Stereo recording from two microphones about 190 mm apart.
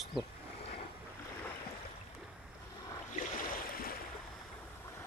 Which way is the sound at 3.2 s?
50° left (ahead or behind).